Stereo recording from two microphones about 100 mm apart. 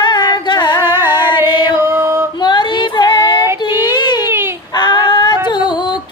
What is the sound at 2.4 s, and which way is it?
Female singing, 45° left (ahead or behind).